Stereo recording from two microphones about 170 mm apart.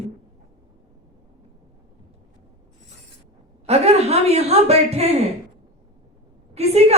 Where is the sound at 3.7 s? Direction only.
40° right (ahead or behind).